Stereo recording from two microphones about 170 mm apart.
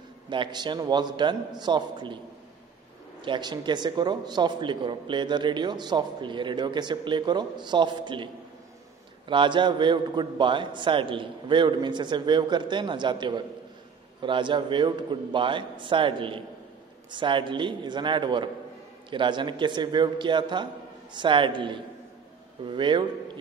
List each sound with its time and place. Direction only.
0.3 s a man's voice: 25° right (ahead or behind)
3.2 s a man's voice: 25° right (ahead or behind)
9.3 s a man's voice: 30° right (ahead or behind)